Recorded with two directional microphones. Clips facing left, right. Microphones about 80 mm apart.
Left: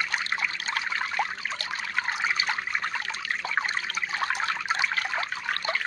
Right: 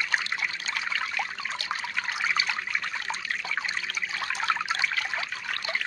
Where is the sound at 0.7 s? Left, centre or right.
Left.